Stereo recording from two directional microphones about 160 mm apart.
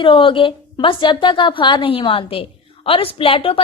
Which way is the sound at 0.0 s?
30° left (ahead or behind).